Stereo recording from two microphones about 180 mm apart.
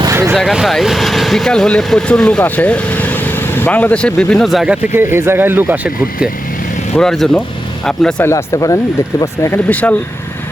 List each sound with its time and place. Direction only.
0.0 s a sound: 15° right (ahead or behind)
0.3 s speech: centre (ahead or behind)
8.3 s speech: 15° left (ahead or behind)